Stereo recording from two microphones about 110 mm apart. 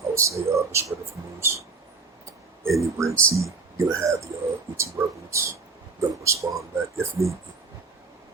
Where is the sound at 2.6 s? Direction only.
25° right (ahead or behind).